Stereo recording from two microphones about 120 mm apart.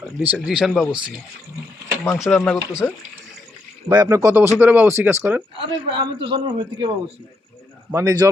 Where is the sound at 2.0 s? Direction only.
5° left (ahead or behind).